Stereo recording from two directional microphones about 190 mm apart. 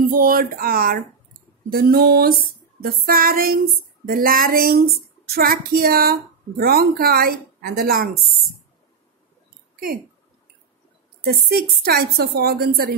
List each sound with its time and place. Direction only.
0.1 s speech: 50° right (ahead or behind)
11.2 s a woman's voice: 55° right (ahead or behind)